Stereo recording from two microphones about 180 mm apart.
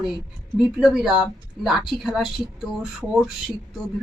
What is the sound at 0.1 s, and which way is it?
A woman's voice, 5° right (ahead or behind).